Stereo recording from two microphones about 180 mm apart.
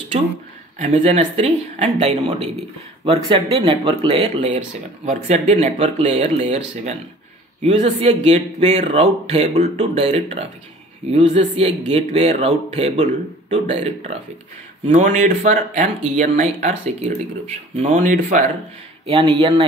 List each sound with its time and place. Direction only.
0.7 s speech: 40° right (ahead or behind)
19.0 s a man's voice: 30° right (ahead or behind)